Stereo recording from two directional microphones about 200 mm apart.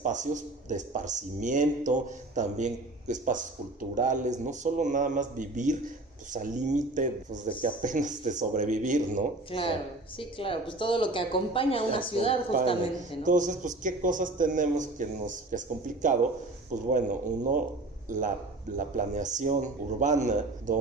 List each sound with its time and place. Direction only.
0.0 s speech: 40° right (ahead or behind)
9.5 s speech: 25° left (ahead or behind)
13.2 s speech: 40° right (ahead or behind)